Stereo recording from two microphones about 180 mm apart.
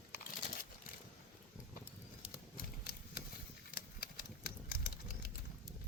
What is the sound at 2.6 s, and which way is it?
Engine, 60° left (ahead or behind).